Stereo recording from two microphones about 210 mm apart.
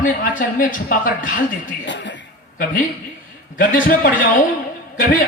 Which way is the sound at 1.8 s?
60° left (ahead or behind).